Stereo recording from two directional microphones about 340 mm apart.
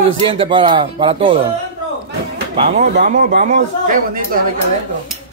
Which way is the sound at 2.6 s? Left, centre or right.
Right.